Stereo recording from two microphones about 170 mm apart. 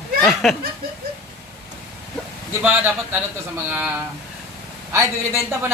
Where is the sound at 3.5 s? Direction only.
10° right (ahead or behind).